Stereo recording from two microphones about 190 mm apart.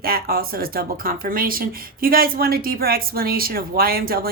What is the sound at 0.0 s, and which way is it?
Speech, 55° right (ahead or behind).